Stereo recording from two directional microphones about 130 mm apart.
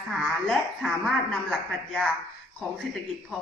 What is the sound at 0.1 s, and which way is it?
A woman's voice, centre (ahead or behind).